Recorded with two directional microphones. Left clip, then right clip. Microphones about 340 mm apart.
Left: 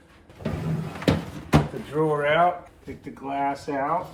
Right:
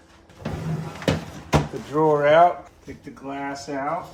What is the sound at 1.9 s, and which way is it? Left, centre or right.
Speech, centre.